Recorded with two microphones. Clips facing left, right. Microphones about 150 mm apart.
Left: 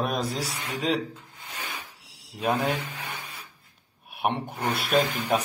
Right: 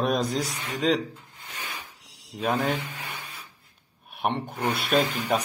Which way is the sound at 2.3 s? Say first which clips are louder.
Even; 5° left (ahead or behind).